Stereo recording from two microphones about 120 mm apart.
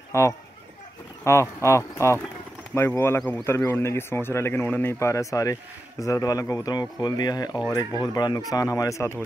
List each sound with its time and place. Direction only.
0.1 s speech: 25° left (ahead or behind)